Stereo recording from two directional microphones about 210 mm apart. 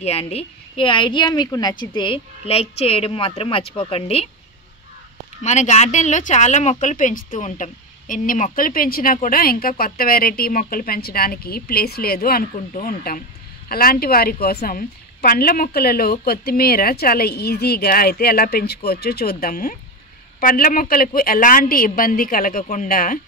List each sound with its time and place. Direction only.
0.0 s a woman's voice: 30° left (ahead or behind)
5.4 s speech: 35° left (ahead or behind)